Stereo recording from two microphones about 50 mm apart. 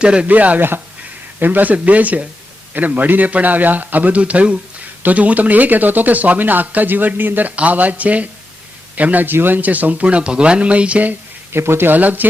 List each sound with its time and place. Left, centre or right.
0.0 s speech: right
0.3 s speech: right
11.5 s speech: right